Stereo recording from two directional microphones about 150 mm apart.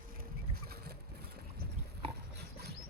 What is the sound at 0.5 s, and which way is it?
Boat, 90° right.